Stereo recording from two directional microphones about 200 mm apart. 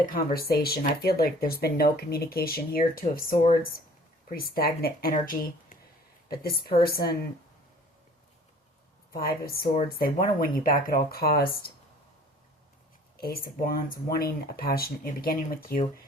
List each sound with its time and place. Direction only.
0.0 s speech: 45° left (ahead or behind)
9.1 s speech: 50° left (ahead or behind)
13.1 s speech: 50° left (ahead or behind)